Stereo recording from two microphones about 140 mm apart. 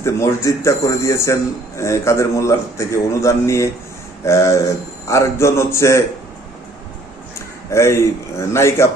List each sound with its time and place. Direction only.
0.0 s a man's voice: 20° left (ahead or behind)
7.3 s a man's voice: 20° left (ahead or behind)